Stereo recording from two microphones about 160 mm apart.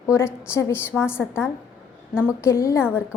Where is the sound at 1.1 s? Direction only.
5° right (ahead or behind).